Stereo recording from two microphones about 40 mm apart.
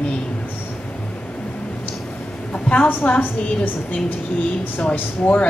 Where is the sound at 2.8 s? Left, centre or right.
Left.